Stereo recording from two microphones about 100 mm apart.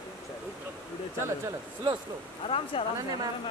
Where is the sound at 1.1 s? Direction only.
25° right (ahead or behind).